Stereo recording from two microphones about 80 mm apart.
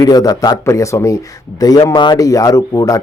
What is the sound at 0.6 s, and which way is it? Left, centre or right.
A man's voice, left.